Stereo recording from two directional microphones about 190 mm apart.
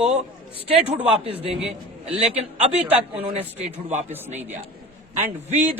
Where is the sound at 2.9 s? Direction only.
30° right (ahead or behind).